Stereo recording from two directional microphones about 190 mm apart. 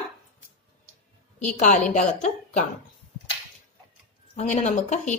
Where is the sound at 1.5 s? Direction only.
40° left (ahead or behind).